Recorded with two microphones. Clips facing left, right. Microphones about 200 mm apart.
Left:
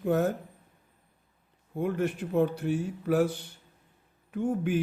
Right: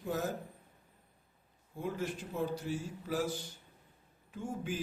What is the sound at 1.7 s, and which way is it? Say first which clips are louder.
Speech: left 8 dB; 60° left (ahead or behind).